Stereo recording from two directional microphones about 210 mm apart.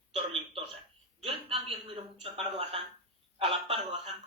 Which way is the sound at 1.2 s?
25° right (ahead or behind).